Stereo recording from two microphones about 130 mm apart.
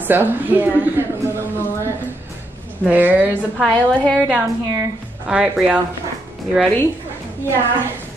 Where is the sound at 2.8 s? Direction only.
15° right (ahead or behind).